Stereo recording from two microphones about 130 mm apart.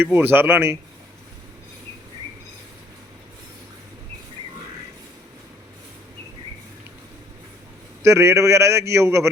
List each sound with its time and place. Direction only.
0.0 s speech: 15° right (ahead or behind)
8.0 s a man's voice: 20° right (ahead or behind)